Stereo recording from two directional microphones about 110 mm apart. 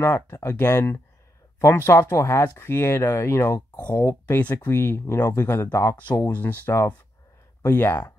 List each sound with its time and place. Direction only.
0.0 s speech: 25° left (ahead or behind)
3.8 s speech: 15° left (ahead or behind)